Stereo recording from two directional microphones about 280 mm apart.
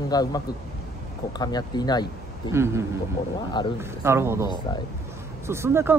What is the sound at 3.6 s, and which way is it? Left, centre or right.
Speech, centre.